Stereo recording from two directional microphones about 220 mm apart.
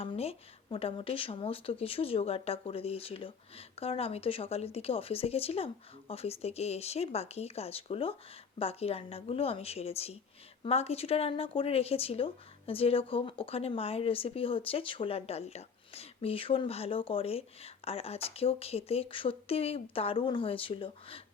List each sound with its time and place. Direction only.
0.0 s speech: 25° left (ahead or behind)